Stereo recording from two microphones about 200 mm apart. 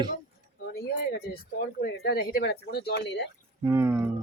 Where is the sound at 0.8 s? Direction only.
50° left (ahead or behind).